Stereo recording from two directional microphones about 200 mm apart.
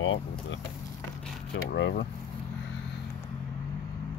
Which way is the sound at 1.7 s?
60° left (ahead or behind).